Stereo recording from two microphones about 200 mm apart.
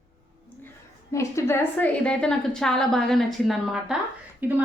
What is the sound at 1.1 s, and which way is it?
A woman's voice, 15° left (ahead or behind).